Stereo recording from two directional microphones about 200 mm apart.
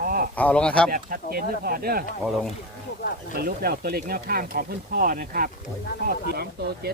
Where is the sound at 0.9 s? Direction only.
45° right (ahead or behind).